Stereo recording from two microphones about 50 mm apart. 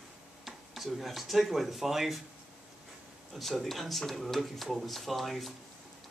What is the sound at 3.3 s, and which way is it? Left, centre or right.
Speech, centre.